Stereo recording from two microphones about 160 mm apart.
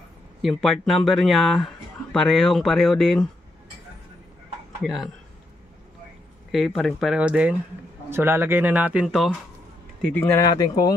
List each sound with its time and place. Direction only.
0.4 s speech: centre (ahead or behind)
4.8 s speech: centre (ahead or behind)
6.5 s speech: centre (ahead or behind)
10.0 s speech: 10° left (ahead or behind)
10.5 s speech: 25° left (ahead or behind)